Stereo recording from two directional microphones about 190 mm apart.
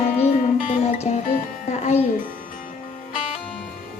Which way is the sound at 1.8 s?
35° left (ahead or behind).